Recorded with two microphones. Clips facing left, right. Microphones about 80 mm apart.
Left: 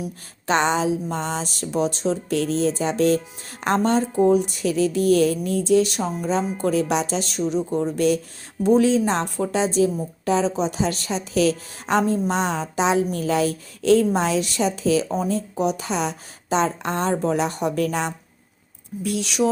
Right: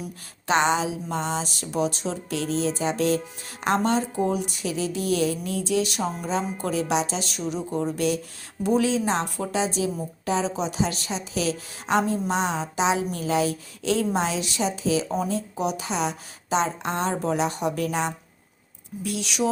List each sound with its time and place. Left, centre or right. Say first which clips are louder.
0.4 s a woman's voice: left 2 dB; left
2.3 s a woman's voice: left 2 dB; left
4.6 s a woman's voice: left 7 dB; left
7.9 s a woman's voice: left 5 dB; left